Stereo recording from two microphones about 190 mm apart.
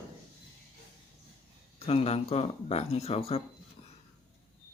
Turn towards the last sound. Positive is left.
turn(degrees=35)  # may be behind; listen again after turning